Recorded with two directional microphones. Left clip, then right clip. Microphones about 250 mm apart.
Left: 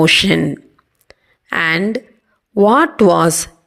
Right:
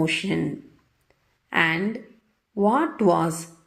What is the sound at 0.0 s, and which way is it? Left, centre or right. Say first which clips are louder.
Speech: left 13 dB; left.